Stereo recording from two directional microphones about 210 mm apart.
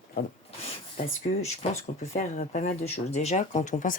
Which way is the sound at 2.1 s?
35° left (ahead or behind).